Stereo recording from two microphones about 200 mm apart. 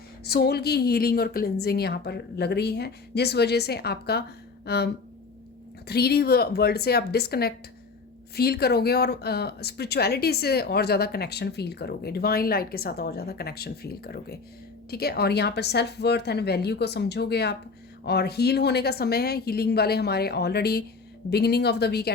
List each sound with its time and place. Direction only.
0.3 s speech: 55° left (ahead or behind)
5.9 s a woman's voice: 55° left (ahead or behind)